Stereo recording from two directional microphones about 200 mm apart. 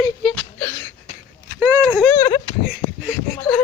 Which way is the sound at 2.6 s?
Centre (ahead or behind).